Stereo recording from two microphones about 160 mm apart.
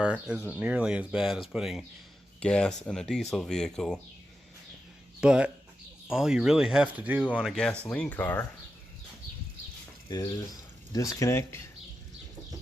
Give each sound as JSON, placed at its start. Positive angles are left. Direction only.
{"t": 0.0, "sound": "speech", "side_deg": -5}
{"t": 5.2, "sound": "speech", "side_deg": -5}
{"t": 10.1, "sound": "speech", "side_deg": 25}